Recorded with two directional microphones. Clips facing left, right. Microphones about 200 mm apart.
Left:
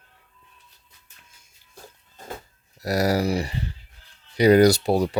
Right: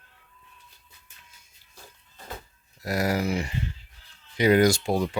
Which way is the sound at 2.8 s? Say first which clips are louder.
Left 4 dB; 35° left (ahead or behind).